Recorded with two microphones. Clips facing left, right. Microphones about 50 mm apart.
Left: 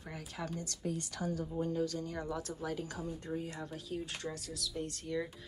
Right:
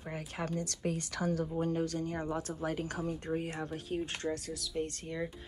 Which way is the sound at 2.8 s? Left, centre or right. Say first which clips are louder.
Right 5 dB; right.